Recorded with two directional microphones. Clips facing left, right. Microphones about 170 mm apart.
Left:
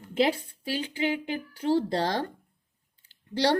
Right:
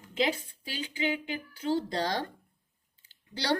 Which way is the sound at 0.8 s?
50° left (ahead or behind).